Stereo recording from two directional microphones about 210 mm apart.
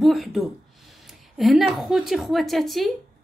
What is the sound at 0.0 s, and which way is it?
A woman's voice, centre (ahead or behind).